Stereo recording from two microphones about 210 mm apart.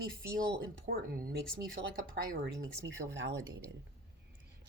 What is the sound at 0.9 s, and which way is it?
Speech, 45° right (ahead or behind).